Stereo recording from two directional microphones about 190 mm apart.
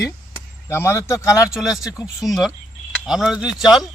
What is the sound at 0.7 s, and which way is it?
Speech, 15° left (ahead or behind).